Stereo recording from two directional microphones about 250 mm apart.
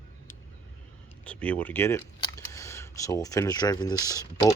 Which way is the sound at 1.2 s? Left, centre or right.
Centre.